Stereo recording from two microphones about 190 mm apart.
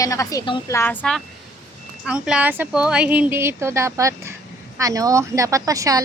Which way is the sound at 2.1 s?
5° right (ahead or behind).